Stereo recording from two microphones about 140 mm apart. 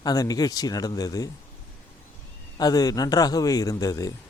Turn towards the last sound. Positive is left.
turn(degrees=25)  # may be behind; listen again after turning